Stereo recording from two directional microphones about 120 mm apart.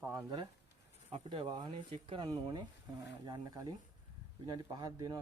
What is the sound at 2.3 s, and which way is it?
Speech, 35° right (ahead or behind).